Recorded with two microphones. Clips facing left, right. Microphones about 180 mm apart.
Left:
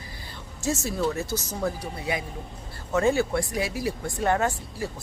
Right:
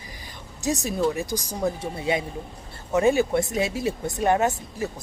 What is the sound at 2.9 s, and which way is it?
Speech, 15° right (ahead or behind).